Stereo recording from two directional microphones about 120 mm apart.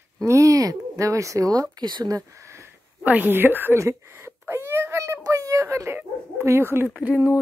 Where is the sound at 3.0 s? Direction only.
15° right (ahead or behind).